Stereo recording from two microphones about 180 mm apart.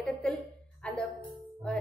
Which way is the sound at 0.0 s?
5° left (ahead or behind).